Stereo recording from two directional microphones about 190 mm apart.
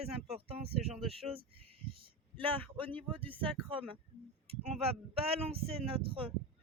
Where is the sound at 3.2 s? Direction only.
10° left (ahead or behind).